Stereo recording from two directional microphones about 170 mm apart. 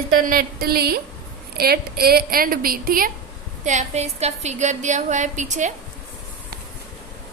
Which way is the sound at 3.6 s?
45° right (ahead or behind).